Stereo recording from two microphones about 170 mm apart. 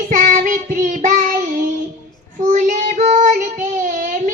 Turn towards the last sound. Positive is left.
turn(degrees=-50)  # may be behind; listen again after turning